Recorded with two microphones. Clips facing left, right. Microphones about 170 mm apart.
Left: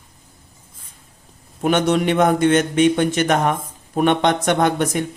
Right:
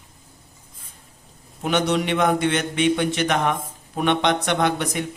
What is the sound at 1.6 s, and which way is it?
Speech, 50° left (ahead or behind).